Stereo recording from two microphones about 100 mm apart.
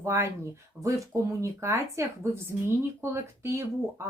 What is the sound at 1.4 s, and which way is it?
Speech, 30° right (ahead or behind).